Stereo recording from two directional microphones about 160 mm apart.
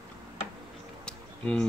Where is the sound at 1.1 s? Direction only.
5° left (ahead or behind).